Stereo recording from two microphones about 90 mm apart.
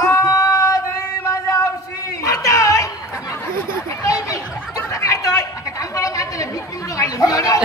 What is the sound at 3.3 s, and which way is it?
Chatter, 35° left (ahead or behind).